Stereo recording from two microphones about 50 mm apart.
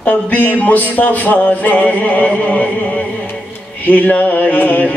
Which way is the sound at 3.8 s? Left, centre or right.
Left.